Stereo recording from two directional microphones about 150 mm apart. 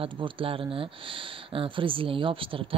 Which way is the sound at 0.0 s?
35° right (ahead or behind).